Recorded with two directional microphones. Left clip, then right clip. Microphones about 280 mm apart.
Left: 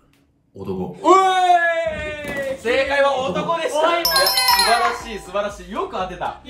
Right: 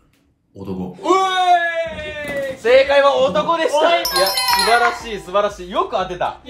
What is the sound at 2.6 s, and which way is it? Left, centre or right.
A man's voice, right.